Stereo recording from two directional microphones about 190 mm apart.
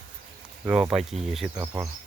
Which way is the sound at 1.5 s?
15° right (ahead or behind).